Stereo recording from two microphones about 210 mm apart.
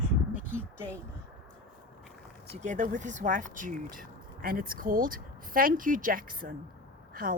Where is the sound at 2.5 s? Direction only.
35° right (ahead or behind).